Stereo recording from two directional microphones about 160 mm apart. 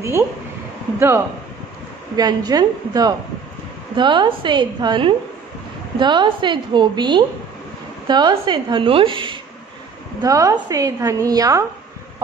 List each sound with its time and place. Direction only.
0.9 s a woman's voice: 15° right (ahead or behind); by 9.4 s 30° right (ahead or behind)
10.2 s a woman's voice: 20° right (ahead or behind)